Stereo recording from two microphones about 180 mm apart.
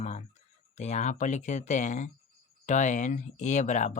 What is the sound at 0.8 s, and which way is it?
Speech, 40° left (ahead or behind).